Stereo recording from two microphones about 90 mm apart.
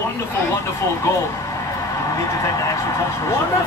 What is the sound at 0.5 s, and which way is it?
Speech, 30° left (ahead or behind).